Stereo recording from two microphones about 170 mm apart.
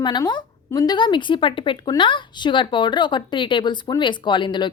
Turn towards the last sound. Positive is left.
turn(degrees=25)  # may be behind; listen again after turning